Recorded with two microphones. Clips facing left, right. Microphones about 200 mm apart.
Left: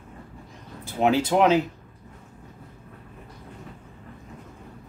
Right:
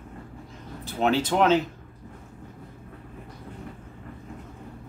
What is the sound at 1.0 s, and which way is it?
Speech, 10° left (ahead or behind).